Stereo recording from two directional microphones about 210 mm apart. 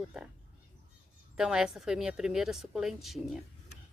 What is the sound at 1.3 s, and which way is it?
Speech, 5° right (ahead or behind).